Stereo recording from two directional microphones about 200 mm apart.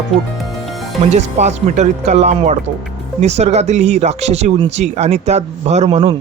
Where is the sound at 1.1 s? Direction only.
35° right (ahead or behind).